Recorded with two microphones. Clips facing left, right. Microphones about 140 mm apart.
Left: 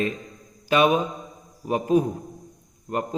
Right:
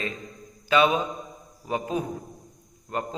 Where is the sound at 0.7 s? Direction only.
45° left (ahead or behind).